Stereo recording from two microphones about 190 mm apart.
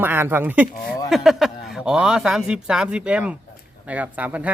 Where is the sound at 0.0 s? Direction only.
10° right (ahead or behind).